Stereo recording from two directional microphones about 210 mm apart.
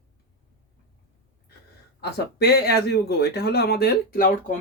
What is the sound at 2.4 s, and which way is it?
Speech, 50° left (ahead or behind).